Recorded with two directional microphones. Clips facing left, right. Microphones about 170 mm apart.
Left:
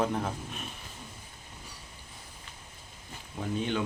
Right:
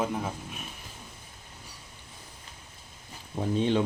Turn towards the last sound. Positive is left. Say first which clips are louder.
# right 5 dB
turn(degrees=-30)  # may be behind; listen again after turning